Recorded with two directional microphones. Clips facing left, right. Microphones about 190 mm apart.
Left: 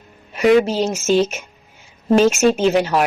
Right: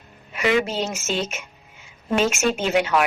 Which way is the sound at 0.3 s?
40° left (ahead or behind).